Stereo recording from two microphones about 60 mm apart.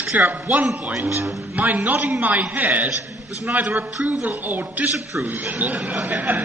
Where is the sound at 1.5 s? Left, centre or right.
Right.